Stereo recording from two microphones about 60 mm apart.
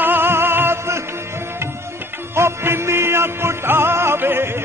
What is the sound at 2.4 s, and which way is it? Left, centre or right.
Music, right.